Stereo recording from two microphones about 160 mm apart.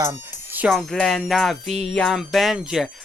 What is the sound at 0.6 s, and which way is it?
Music, centre (ahead or behind).